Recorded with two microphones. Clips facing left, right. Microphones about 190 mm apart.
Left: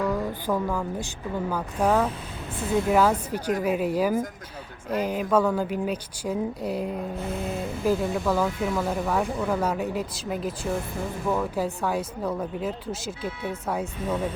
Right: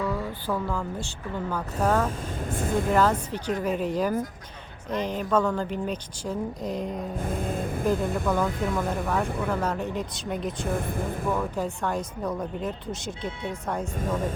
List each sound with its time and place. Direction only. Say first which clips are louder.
0.1 s a sound: left 3 dB; 15° left (ahead or behind)
1.8 s speech: left 2 dB; 10° left (ahead or behind)
2.0 s speech: right 2 dB; 50° right (ahead or behind)
2.9 s speech: left 1 dB; 10° left (ahead or behind)
7.2 s music: even; 50° right (ahead or behind)
8.0 s speech: left 1 dB; centre (ahead or behind)
13.9 s music: even; 45° right (ahead or behind)